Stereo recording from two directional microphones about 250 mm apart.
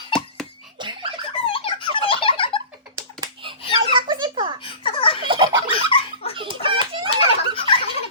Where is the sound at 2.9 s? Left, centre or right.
Right.